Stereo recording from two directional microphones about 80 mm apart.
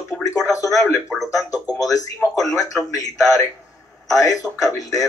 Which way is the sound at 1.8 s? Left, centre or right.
Left.